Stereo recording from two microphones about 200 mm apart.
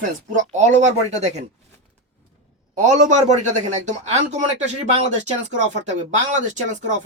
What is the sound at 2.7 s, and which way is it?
Speech, 35° right (ahead or behind).